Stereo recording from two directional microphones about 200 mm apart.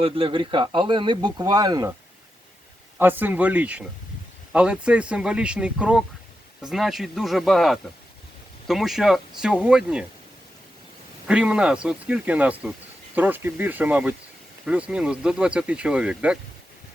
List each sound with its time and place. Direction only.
0.0 s speech: 25° right (ahead or behind)
3.0 s speech: 10° right (ahead or behind)
11.3 s speech: 5° right (ahead or behind)